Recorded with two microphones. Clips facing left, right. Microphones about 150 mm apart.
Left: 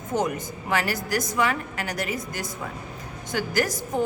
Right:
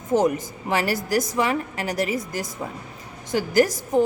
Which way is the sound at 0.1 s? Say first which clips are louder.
Right 6 dB; 30° right (ahead or behind).